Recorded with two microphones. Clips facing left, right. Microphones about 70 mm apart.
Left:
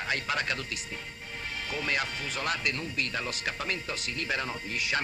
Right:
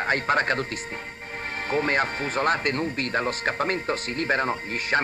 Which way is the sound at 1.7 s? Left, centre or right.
Right.